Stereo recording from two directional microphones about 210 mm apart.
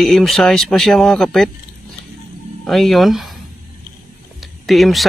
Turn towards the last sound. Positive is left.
turn(degrees=0)  # may be behind; listen again after turning